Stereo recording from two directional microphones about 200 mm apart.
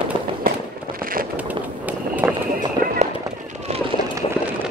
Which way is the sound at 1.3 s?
10° right (ahead or behind).